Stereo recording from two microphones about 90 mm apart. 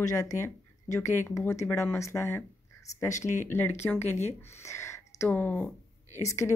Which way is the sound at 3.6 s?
25° left (ahead or behind).